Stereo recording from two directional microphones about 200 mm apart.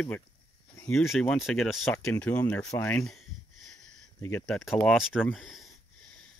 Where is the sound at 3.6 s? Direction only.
5° left (ahead or behind).